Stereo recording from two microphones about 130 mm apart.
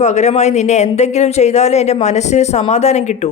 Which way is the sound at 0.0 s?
60° left (ahead or behind).